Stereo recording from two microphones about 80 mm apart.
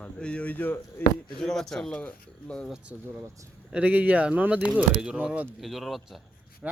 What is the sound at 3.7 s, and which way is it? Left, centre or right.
A man's voice, centre.